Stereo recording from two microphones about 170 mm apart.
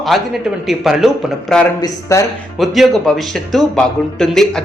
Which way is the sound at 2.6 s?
Centre (ahead or behind).